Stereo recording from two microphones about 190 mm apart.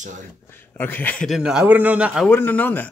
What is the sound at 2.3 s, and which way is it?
Speech, 10° left (ahead or behind).